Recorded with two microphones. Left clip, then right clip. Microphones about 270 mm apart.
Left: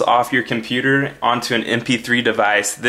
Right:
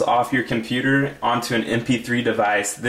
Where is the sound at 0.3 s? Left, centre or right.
Centre.